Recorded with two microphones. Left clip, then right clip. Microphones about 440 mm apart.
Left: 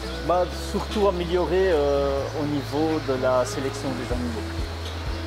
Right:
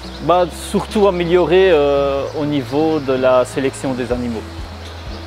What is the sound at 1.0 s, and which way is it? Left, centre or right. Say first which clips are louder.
Speech: right 9 dB; right.